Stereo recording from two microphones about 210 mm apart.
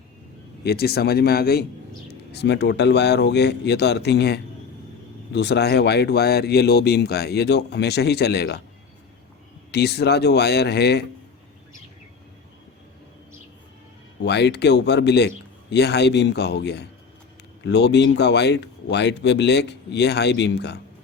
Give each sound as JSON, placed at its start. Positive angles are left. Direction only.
{"t": 0.6, "sound": "speech", "side_deg": 50}
{"t": 9.7, "sound": "speech", "side_deg": 50}
{"t": 14.3, "sound": "speech", "side_deg": 55}